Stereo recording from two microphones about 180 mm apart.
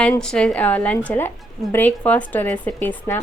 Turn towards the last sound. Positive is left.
turn(degrees=10)  # may be behind; listen again after turning